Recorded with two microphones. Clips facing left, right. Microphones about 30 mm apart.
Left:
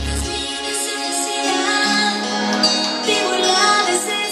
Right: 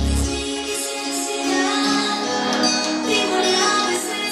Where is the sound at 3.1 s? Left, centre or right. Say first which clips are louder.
Left 2 dB; left.